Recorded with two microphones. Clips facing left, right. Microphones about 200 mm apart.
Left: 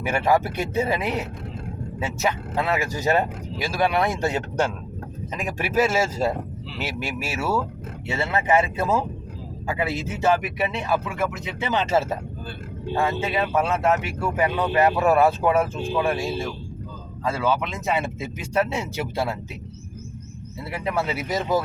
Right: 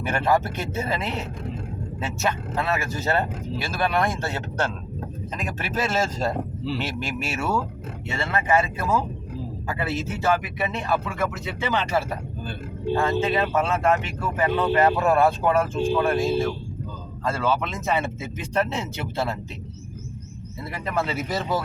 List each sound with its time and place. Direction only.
0.0 s speech: 10° left (ahead or behind)
2.6 s speech: 15° left (ahead or behind)
8.2 s speech: 20° left (ahead or behind)
12.9 s speech: 10° left (ahead or behind)
17.2 s speech: 10° left (ahead or behind)
20.7 s speech: 10° left (ahead or behind)